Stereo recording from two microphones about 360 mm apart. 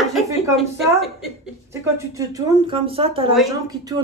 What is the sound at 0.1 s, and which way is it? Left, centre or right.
Speech, centre.